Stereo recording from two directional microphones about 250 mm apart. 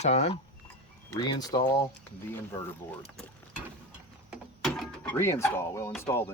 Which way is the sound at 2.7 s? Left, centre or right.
Centre.